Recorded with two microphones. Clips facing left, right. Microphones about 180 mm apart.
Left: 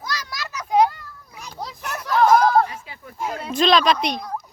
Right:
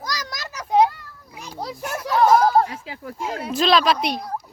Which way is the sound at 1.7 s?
10° right (ahead or behind).